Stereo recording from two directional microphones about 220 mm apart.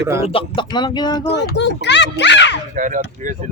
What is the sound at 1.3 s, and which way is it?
Speech, 50° left (ahead or behind).